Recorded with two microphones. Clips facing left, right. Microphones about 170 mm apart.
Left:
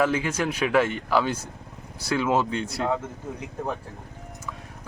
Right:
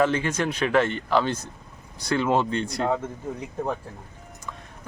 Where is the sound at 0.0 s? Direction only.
5° left (ahead or behind).